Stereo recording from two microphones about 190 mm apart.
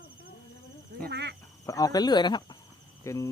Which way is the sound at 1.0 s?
60° right (ahead or behind).